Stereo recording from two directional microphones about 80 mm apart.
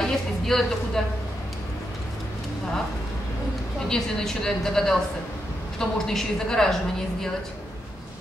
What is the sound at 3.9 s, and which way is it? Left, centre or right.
A woman's voice, centre.